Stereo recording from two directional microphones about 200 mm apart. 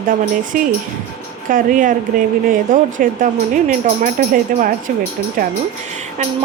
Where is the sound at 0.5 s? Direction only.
40° right (ahead or behind).